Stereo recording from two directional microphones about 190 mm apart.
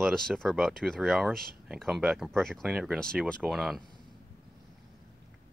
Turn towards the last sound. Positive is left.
turn(degrees=0)  # may be behind; listen again after turning